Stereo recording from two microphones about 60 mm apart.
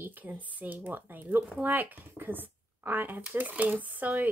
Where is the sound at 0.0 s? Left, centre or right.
Right.